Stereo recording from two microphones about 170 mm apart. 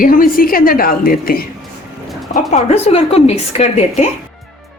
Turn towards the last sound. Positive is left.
turn(degrees=40)  # may be behind; listen again after turning